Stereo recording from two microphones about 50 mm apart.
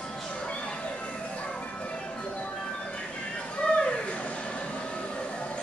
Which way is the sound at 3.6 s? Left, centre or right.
Left.